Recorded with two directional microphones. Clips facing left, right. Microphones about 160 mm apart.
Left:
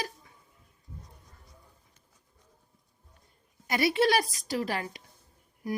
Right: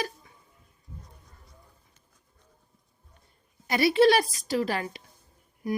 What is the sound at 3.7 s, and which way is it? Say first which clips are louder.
A woman's voice: right 5 dB; 30° right (ahead or behind).